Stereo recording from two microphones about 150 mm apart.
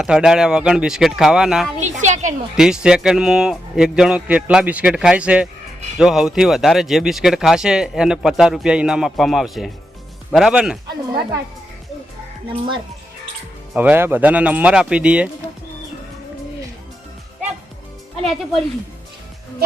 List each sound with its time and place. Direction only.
0.0 s speech: 5° right (ahead or behind)
1.8 s a woman's voice: 55° right (ahead or behind)
2.6 s speech: 5° right (ahead or behind)
12.5 s speech: 30° right (ahead or behind)
13.7 s speech: 10° right (ahead or behind)
18.2 s speech: centre (ahead or behind)